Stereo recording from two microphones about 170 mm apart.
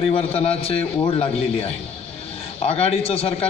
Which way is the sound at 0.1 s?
35° left (ahead or behind).